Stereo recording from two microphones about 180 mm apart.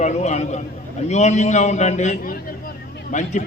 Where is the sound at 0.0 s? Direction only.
40° left (ahead or behind).